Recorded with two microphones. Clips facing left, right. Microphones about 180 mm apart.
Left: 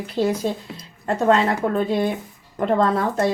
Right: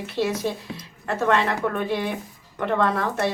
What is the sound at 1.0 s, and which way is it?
A woman's voice, 30° left (ahead or behind).